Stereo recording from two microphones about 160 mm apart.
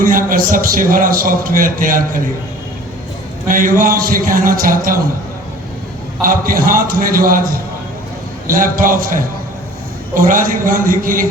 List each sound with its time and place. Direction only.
0.0 s a man's voice: 60° right (ahead or behind)
3.5 s a man's voice: 60° right (ahead or behind)
6.2 s a man's voice: 65° right (ahead or behind)
8.4 s a man's voice: 60° right (ahead or behind)